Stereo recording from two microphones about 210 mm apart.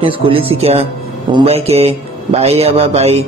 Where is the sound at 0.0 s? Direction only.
25° right (ahead or behind).